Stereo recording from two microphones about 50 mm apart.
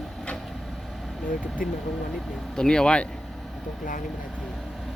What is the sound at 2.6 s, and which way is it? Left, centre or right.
Speech, centre.